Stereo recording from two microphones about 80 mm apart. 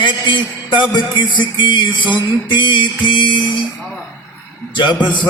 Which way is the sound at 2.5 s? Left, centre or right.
Left.